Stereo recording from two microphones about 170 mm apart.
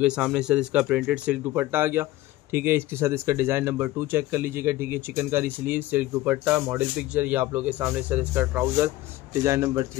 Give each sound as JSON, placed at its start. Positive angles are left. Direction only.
{"t": 0.0, "sound": "speech", "side_deg": -5}